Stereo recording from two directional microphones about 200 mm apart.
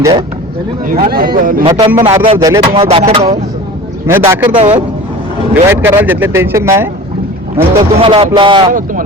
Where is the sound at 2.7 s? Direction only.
30° right (ahead or behind).